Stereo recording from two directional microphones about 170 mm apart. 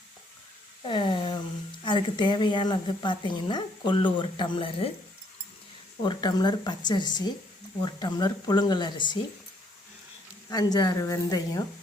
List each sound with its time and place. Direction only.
0.9 s a sound: 30° left (ahead or behind)
1.8 s a woman's voice: 25° left (ahead or behind)
6.0 s a woman's voice: 25° left (ahead or behind)
10.5 s a woman's voice: 25° left (ahead or behind)